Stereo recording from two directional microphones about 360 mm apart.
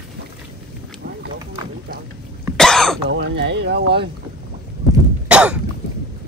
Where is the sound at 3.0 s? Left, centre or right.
Right.